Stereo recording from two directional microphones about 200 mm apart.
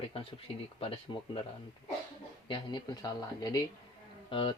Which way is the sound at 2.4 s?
25° left (ahead or behind).